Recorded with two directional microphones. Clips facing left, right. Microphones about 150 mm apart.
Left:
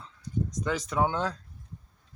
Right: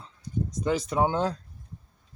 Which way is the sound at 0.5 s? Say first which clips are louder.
Right 4 dB; 30° right (ahead or behind).